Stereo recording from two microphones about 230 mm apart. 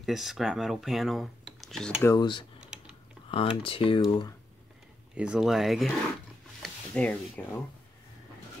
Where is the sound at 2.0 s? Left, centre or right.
Centre.